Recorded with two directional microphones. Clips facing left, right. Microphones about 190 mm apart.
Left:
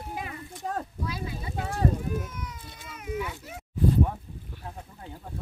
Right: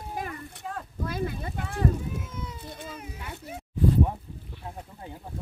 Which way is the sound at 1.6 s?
40° left (ahead or behind).